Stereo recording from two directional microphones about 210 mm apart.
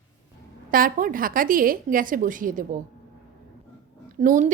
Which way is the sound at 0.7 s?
40° right (ahead or behind).